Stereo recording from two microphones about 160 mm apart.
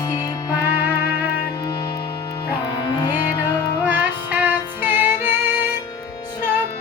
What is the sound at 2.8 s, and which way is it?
Music, 30° left (ahead or behind).